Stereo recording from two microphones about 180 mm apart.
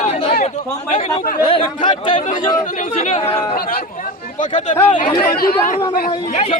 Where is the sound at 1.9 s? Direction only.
25° left (ahead or behind).